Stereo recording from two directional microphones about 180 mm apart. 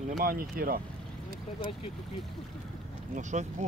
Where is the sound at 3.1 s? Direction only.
40° right (ahead or behind).